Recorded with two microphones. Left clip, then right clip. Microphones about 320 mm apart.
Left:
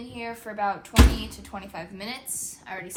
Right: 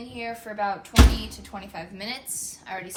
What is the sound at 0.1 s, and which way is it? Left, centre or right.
A woman's voice, centre.